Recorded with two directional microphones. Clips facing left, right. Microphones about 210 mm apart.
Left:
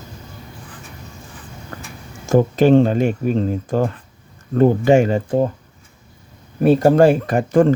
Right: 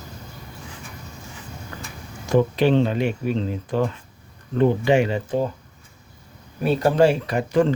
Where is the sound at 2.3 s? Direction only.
45° left (ahead or behind).